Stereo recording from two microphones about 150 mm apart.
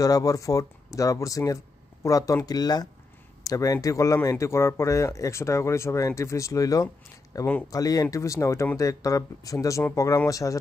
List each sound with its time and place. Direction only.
0.0 s speech: 25° left (ahead or behind)